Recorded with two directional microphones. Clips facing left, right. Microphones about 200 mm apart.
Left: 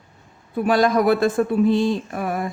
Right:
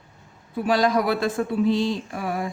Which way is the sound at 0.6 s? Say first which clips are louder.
Left 3 dB; 50° left (ahead or behind).